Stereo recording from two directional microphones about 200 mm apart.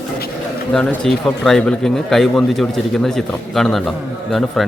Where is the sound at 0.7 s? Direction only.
5° left (ahead or behind).